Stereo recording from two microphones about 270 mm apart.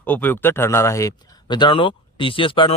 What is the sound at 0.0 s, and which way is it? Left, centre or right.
Speech, centre.